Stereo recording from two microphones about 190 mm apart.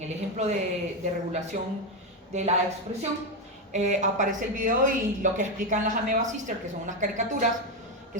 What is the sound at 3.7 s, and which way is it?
A man's voice, 40° right (ahead or behind).